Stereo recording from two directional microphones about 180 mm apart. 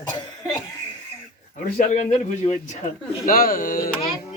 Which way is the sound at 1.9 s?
40° left (ahead or behind).